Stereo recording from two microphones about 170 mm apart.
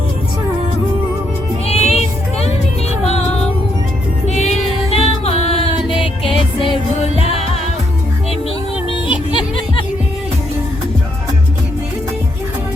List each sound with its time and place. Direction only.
1.6 s music: 40° left (ahead or behind)
3.0 s music: 40° left (ahead or behind)
8.9 s music: 30° left (ahead or behind)